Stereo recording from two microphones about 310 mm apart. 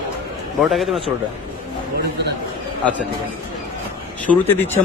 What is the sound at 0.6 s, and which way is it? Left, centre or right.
Speech, centre.